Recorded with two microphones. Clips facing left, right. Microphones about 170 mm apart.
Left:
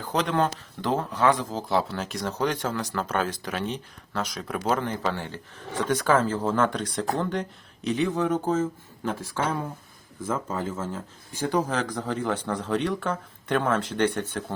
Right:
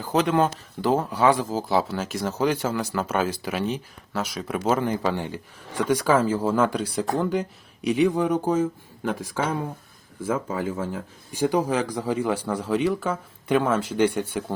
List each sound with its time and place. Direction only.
0.0 s speech: 5° right (ahead or behind)